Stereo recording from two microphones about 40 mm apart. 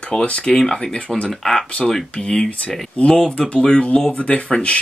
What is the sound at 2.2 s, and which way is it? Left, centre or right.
Speech, left.